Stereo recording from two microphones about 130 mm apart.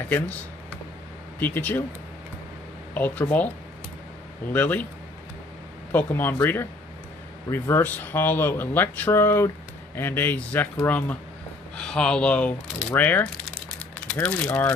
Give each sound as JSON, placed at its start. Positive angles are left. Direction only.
{"t": 1.4, "sound": "speech", "side_deg": 15}
{"t": 2.9, "sound": "speech", "side_deg": 15}
{"t": 4.5, "sound": "speech", "side_deg": 10}
{"t": 5.9, "sound": "speech", "side_deg": 15}